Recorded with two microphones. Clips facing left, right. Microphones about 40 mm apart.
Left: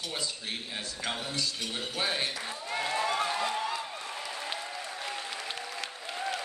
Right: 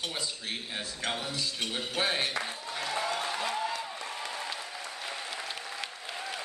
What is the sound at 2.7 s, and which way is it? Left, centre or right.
Applause, left.